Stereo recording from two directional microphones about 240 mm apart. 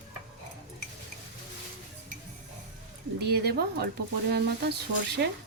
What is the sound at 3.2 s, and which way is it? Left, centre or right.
A woman's voice, right.